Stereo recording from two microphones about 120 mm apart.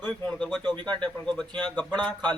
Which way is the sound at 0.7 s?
40° right (ahead or behind).